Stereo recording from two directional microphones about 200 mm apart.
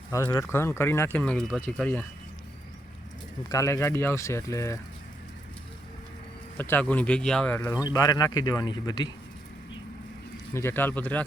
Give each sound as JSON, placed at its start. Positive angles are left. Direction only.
{"t": 0.1, "sound": "speech", "side_deg": 15}
{"t": 3.5, "sound": "speech", "side_deg": 15}
{"t": 6.6, "sound": "speech", "side_deg": 10}
{"t": 10.5, "sound": "speech", "side_deg": 10}